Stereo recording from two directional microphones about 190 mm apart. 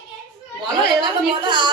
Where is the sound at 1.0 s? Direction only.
25° right (ahead or behind).